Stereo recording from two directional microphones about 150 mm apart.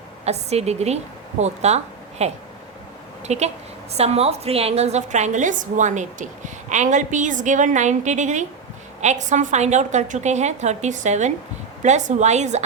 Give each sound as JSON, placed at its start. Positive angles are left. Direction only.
{"t": 0.3, "sound": "a woman's voice", "side_deg": -45}